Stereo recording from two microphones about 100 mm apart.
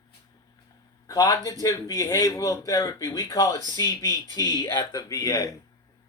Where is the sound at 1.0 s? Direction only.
40° left (ahead or behind).